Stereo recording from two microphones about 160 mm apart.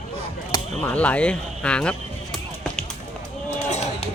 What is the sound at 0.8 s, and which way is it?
Speech, 5° left (ahead or behind).